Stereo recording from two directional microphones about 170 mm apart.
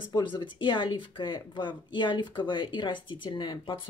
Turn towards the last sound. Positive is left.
turn(degrees=30)  # may be behind; listen again after turning